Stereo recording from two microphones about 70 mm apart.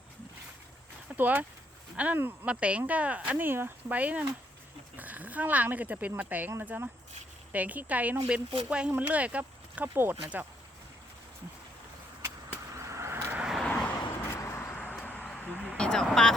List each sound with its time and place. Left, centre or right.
1.1 s speech: right
2.5 s speech: centre
12.7 s skateboard: right
13.7 s vehicle: centre
13.9 s vehicle: left
15.8 s vehicle: centre